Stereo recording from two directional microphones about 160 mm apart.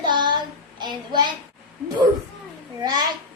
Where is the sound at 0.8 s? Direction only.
30° right (ahead or behind).